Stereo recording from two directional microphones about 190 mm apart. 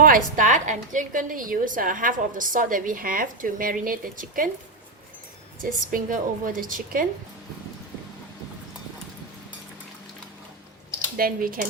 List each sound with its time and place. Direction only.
0.0 s a woman's voice: 45° right (ahead or behind)
5.9 s a woman's voice: 45° right (ahead or behind)
11.2 s a woman's voice: 50° right (ahead or behind)